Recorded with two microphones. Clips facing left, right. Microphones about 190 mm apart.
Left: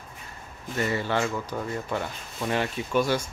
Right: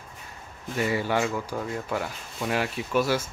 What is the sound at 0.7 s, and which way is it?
Speech, 10° right (ahead or behind).